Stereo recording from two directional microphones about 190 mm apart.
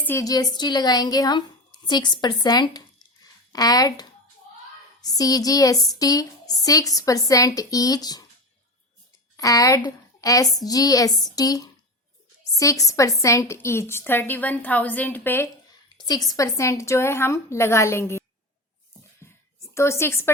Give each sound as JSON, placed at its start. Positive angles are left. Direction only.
{"t": 0.0, "sound": "speech", "side_deg": 15}
{"t": 9.4, "sound": "a woman's voice", "side_deg": 20}
{"t": 19.7, "sound": "a woman's voice", "side_deg": 15}